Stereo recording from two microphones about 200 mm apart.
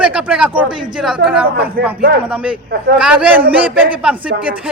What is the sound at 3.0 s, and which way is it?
Speech, 5° right (ahead or behind).